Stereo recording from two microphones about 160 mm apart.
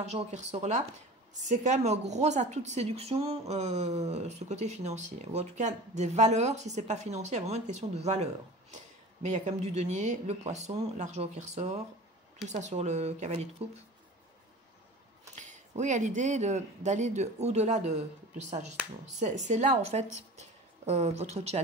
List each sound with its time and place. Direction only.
0.0 s a woman's voice: 45° right (ahead or behind)
15.3 s a woman's voice: 45° right (ahead or behind)